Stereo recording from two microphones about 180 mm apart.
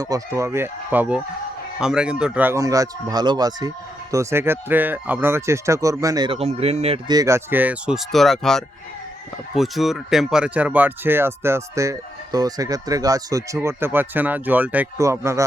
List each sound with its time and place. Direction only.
0.0 s speech: 20° right (ahead or behind); by 7.0 s 35° right (ahead or behind)
7.1 s speech: 20° right (ahead or behind)